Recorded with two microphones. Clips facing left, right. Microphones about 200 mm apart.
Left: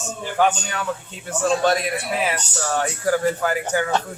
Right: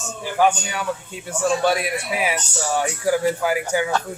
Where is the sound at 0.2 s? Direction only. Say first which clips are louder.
Right 1 dB; 10° right (ahead or behind).